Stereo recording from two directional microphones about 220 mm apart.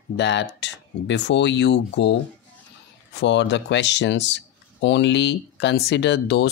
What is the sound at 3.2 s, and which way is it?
Speech, 55° left (ahead or behind).